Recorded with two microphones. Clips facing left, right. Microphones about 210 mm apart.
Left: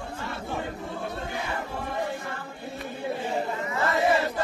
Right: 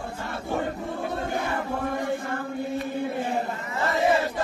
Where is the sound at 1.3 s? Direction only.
50° right (ahead or behind).